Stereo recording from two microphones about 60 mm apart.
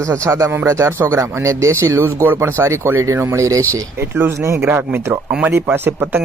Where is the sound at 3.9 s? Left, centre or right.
Right.